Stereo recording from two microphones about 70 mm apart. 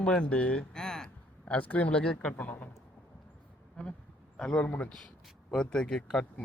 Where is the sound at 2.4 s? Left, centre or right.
Left.